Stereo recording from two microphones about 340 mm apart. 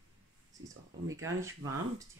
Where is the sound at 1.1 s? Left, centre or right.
Centre.